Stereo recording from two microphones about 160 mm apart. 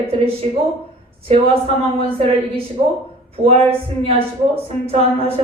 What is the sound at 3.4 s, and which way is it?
A woman's voice, 35° right (ahead or behind).